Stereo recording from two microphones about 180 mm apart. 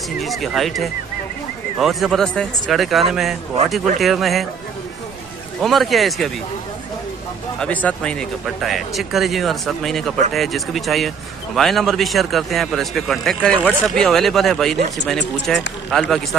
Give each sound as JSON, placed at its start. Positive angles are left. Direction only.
{"t": 0.2, "sound": "speech", "side_deg": 0}
{"t": 5.6, "sound": "speech", "side_deg": 0}
{"t": 7.6, "sound": "speech", "side_deg": 5}